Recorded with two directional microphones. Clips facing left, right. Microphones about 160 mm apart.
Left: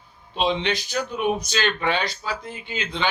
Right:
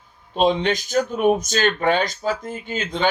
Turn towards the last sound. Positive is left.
turn(degrees=-45)  # may be behind; listen again after turning